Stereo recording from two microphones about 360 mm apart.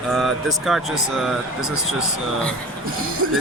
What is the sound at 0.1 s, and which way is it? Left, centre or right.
Speech, centre.